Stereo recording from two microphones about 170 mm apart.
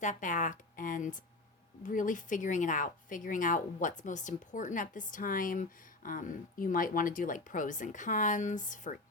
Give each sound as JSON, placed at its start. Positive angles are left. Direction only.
{"t": 0.0, "sound": "speech", "side_deg": 50}